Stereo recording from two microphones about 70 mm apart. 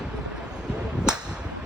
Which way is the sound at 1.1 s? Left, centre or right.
Centre.